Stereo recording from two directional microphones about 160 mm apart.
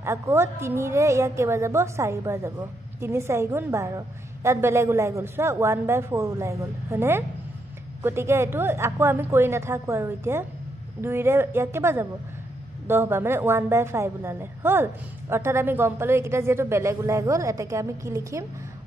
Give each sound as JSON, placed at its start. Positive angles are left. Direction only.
{"t": 0.0, "sound": "a woman's voice", "side_deg": -15}